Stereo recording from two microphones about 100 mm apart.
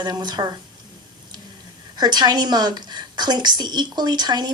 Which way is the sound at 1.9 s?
45° right (ahead or behind).